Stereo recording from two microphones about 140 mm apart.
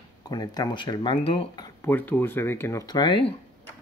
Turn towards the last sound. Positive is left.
turn(degrees=40)  # may be behind; listen again after turning